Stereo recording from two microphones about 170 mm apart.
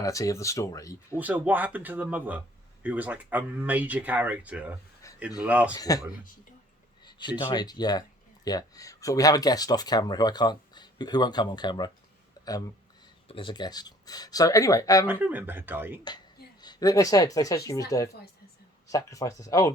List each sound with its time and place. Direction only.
0.0 s speech: 20° left (ahead or behind)
1.1 s speech: 10° right (ahead or behind)
5.0 s a sound: 15° left (ahead or behind)
5.4 s speech: 10° right (ahead or behind)
5.7 s speech: 20° left (ahead or behind)
13.2 s speech: 30° left (ahead or behind)
15.0 s speech: 10° right (ahead or behind)
16.0 s a woman's voice: 25° left (ahead or behind)